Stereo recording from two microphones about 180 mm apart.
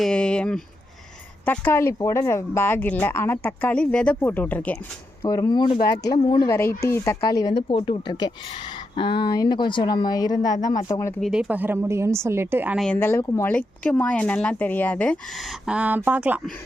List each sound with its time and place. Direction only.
0.0 s speech: 5° left (ahead or behind)
5.2 s speech: 20° left (ahead or behind)
11.2 s speech: 5° right (ahead or behind)
12.8 s speech: 10° left (ahead or behind); by 16.4 s 10° right (ahead or behind)